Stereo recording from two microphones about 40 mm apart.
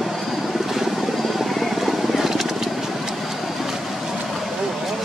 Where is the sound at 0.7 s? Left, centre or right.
Centre.